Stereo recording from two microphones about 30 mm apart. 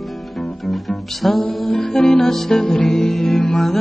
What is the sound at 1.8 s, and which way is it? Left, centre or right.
Music, left.